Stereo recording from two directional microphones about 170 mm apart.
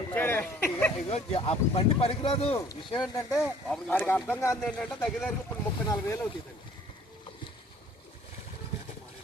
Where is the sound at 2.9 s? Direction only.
25° left (ahead or behind).